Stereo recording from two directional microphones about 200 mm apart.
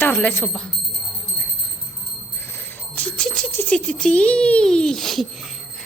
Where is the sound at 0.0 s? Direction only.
5° left (ahead or behind).